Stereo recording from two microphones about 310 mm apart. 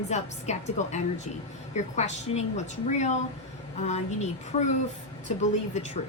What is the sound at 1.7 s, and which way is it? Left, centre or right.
A woman's voice, left.